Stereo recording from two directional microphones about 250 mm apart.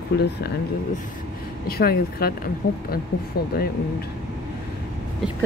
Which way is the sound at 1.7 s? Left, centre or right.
Left.